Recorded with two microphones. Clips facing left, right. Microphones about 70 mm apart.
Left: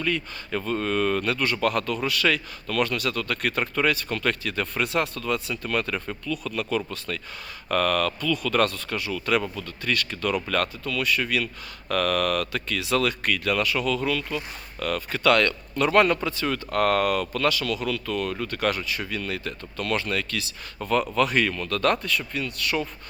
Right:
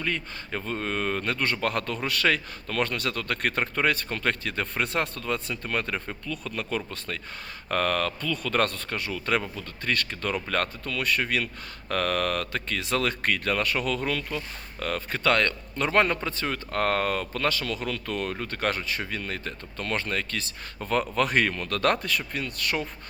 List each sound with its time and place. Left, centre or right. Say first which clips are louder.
0.0 s speech: left 3 dB; right
16.2 s speech: left 3 dB; right